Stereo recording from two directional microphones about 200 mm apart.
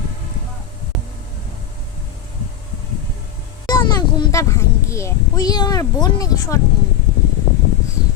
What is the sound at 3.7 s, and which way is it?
A child's voice, 20° left (ahead or behind).